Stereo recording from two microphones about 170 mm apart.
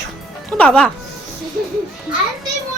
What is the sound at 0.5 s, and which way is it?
Speech, 5° left (ahead or behind).